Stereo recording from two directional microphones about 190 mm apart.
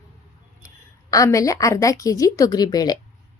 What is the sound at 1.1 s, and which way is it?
A woman's voice, 15° left (ahead or behind).